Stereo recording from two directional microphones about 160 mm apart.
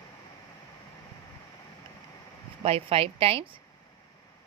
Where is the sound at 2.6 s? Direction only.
40° right (ahead or behind).